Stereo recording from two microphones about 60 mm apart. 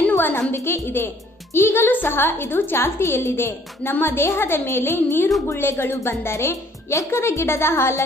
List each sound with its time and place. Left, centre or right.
0.1 s music: left
0.8 s speech: left
3.0 s speech: left